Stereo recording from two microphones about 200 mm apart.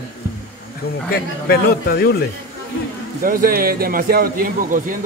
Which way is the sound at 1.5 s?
50° left (ahead or behind).